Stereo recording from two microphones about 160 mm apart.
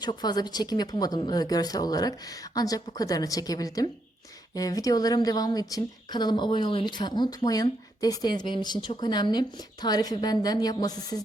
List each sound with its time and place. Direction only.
0.0 s a woman's voice: 25° left (ahead or behind)